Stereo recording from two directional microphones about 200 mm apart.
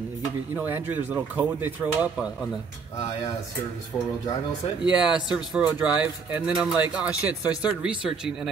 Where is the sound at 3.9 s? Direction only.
15° left (ahead or behind).